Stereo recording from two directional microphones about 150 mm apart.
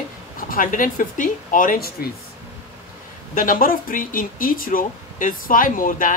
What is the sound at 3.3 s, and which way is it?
Speech, 65° left (ahead or behind).